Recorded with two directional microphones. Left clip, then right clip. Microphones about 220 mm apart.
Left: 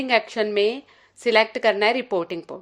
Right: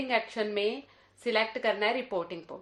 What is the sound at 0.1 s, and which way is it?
A woman's voice, 40° left (ahead or behind).